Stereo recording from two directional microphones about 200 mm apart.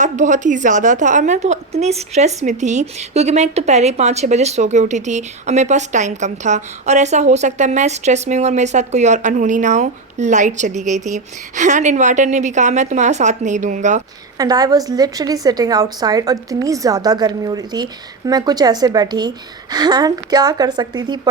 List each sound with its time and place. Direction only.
0.0 s a woman's voice: 40° right (ahead or behind)
14.3 s a woman's voice: 20° right (ahead or behind)